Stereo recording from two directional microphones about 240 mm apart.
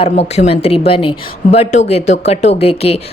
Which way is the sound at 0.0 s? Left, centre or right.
Left.